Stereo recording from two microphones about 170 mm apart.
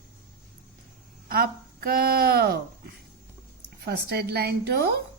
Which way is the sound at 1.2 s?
65° right (ahead or behind).